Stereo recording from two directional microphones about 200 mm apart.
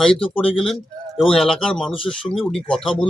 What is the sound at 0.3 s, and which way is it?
Speech, centre (ahead or behind).